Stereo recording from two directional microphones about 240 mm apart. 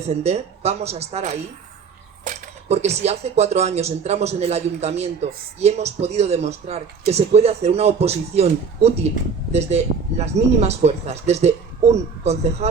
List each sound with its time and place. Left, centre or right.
0.1 s speech: right